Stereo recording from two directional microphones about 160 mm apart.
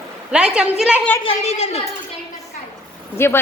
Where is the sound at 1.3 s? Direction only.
40° left (ahead or behind).